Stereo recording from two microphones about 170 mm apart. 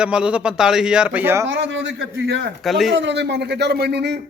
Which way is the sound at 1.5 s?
90° right.